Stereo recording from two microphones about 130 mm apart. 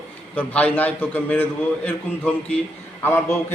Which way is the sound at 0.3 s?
10° left (ahead or behind).